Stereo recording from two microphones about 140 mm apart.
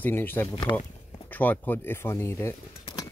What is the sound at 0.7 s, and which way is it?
Speech, 35° left (ahead or behind).